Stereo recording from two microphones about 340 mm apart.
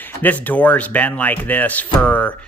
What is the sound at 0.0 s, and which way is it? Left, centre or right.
A man's voice, centre.